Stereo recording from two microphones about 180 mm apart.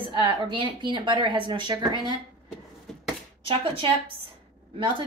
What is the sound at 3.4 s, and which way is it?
A woman's voice, 30° right (ahead or behind).